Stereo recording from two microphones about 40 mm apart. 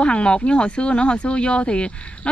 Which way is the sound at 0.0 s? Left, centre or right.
Left.